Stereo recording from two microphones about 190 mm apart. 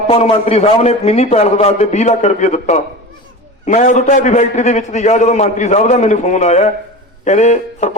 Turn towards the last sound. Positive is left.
turn(degrees=35)  # may be behind; listen again after turning